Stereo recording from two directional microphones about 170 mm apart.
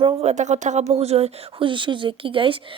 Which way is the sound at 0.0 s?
40° right (ahead or behind).